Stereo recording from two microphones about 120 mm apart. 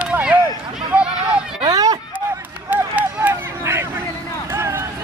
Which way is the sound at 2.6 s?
15° right (ahead or behind).